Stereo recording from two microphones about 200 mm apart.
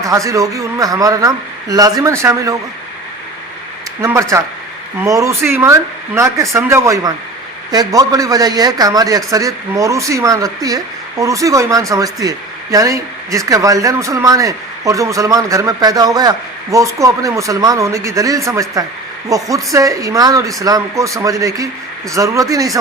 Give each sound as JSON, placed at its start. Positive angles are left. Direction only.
{"t": 0.0, "sound": "speech", "side_deg": -15}
{"t": 4.0, "sound": "speech", "side_deg": -15}